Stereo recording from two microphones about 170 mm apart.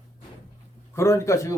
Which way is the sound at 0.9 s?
15° left (ahead or behind).